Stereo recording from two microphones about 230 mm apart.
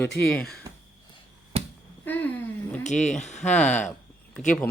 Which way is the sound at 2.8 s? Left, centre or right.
Left.